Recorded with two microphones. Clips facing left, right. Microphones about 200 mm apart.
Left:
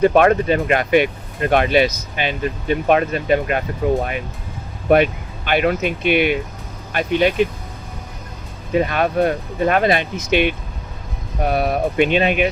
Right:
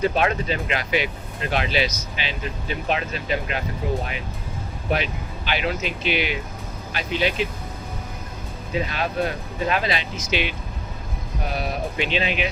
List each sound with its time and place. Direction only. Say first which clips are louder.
0.0 s speech: left 8 dB; 55° left (ahead or behind)
4.9 s speech: left 11 dB; 55° left (ahead or behind)
8.7 s speech: left 8 dB; 55° left (ahead or behind)
11.5 s speech: left 9 dB; 55° left (ahead or behind)